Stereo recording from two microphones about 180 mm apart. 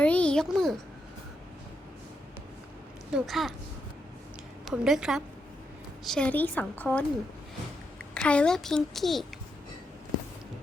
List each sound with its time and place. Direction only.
0.0 s a sound: 5° left (ahead or behind)
3.2 s a child's voice: centre (ahead or behind)
4.6 s a child's voice: centre (ahead or behind)